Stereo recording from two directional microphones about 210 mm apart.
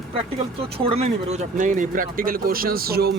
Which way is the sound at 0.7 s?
25° right (ahead or behind).